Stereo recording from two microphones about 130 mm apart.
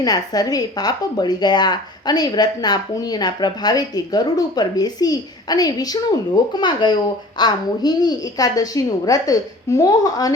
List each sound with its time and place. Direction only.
0.0 s a child's voice: 30° left (ahead or behind)